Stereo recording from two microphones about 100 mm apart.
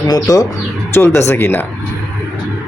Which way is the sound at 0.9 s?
25° left (ahead or behind).